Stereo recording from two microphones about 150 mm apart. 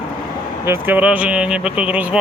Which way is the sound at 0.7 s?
15° right (ahead or behind).